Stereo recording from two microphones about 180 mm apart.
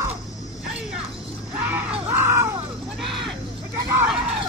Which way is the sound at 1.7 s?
10° right (ahead or behind).